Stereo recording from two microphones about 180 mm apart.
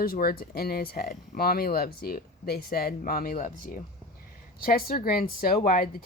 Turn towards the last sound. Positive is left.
turn(degrees=55)  # may be behind; listen again after turning